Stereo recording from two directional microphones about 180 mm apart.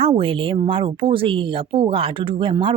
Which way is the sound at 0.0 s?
30° right (ahead or behind).